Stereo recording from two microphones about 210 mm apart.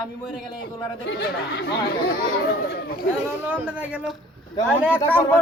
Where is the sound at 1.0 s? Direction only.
55° left (ahead or behind).